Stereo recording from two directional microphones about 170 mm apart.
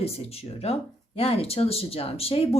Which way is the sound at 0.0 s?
35° left (ahead or behind).